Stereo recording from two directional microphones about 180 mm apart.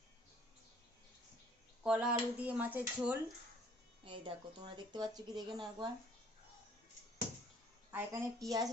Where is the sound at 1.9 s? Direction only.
5° right (ahead or behind).